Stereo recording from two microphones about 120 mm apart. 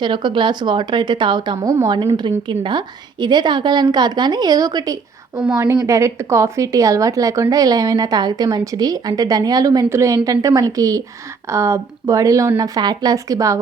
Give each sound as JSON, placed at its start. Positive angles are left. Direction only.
{"t": 0.0, "sound": "a woman's voice", "side_deg": -40}